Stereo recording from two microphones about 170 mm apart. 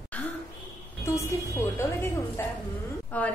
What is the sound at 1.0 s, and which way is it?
A woman's voice, 15° left (ahead or behind).